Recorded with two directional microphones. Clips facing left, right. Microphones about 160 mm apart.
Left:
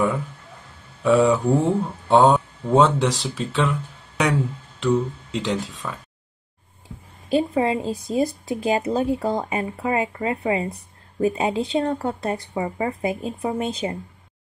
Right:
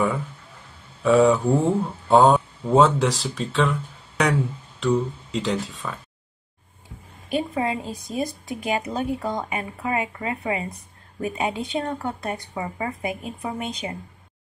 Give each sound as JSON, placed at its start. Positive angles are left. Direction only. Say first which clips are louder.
{"t": 1.0, "sound": "speech", "louder": "even", "side_deg": 0}
{"t": 7.2, "sound": "speech", "louder": "left 4 dB", "side_deg": 30}